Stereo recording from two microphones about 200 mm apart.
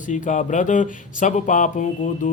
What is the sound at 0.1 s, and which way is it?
Speech, 40° left (ahead or behind).